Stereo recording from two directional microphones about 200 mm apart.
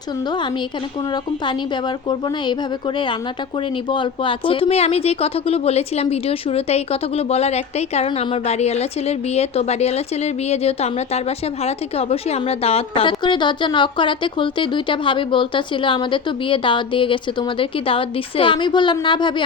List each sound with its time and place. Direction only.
1.1 s speech: 20° left (ahead or behind)